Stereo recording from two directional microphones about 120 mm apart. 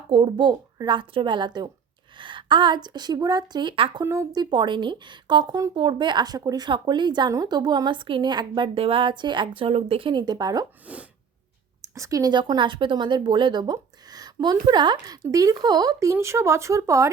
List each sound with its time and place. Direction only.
0.1 s a woman's voice: 50° right (ahead or behind)
4.0 s a woman's voice: 25° right (ahead or behind)
5.7 s a woman's voice: 40° right (ahead or behind)
9.6 s a woman's voice: 55° right (ahead or behind); by 10.7 s 30° right (ahead or behind)
10.9 s sneeze: 10° right (ahead or behind)
11.8 s a woman's voice: 25° right (ahead or behind)